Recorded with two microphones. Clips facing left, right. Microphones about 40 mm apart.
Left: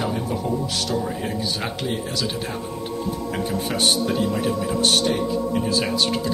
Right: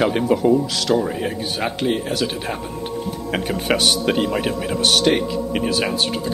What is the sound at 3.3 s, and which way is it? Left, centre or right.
A man's voice, right.